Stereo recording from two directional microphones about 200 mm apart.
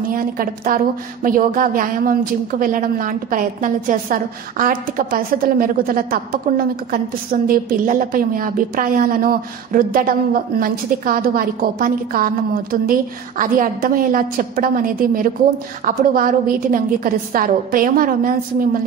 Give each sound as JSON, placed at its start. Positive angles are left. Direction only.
{"t": 0.1, "sound": "a woman's voice", "side_deg": -45}
{"t": 13.4, "sound": "a woman's voice", "side_deg": -45}